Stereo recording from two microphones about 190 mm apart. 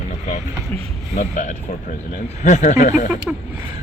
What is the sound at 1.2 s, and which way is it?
Speech, 40° left (ahead or behind).